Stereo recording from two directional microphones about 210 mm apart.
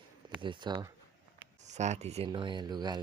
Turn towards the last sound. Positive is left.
turn(degrees=-20)  # may be behind; listen again after turning